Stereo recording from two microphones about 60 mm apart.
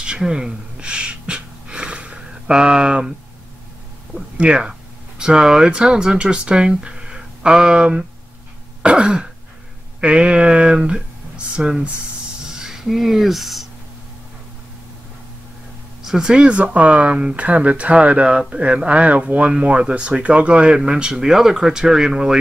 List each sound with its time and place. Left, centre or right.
0.0 s gasp: centre
4.4 s speech: centre
8.8 s throat clearing: centre
9.9 s speech: centre
16.0 s speech: centre